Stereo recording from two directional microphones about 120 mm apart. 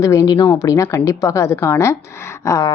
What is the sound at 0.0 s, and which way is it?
Speech, 30° left (ahead or behind).